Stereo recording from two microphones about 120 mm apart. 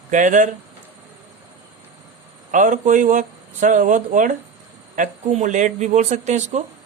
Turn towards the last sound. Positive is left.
turn(degrees=-75)  # may be behind; listen again after turning